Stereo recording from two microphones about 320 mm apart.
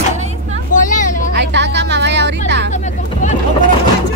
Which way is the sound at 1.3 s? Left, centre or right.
Right.